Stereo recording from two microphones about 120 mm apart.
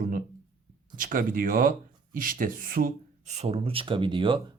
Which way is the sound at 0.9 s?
90° right.